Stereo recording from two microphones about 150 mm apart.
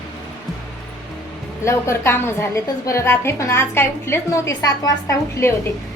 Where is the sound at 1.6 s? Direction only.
20° left (ahead or behind).